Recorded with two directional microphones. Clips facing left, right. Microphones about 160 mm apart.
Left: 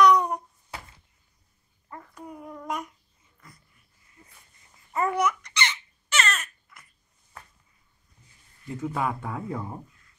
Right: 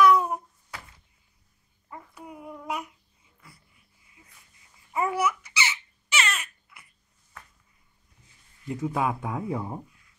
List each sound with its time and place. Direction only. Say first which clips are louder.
0.0 s a sound: even; 5° right (ahead or behind)
1.9 s child singing: left 1 dB; 10° right (ahead or behind)
4.9 s babbling: left 1 dB; 10° right (ahead or behind)
8.8 s speech: right 1 dB; 15° right (ahead or behind)